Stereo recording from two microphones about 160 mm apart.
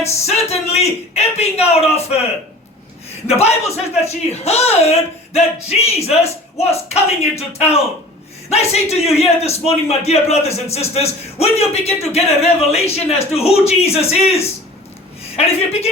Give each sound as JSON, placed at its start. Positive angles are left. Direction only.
{"t": 0.0, "sound": "a man's voice", "side_deg": 40}
{"t": 3.2, "sound": "a man's voice", "side_deg": 40}